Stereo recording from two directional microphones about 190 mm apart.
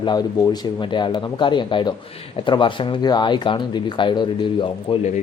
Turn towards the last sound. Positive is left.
turn(degrees=25)  # may be behind; listen again after turning